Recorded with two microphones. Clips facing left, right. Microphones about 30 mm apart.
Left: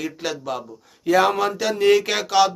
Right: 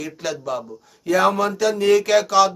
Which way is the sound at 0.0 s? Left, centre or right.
Centre.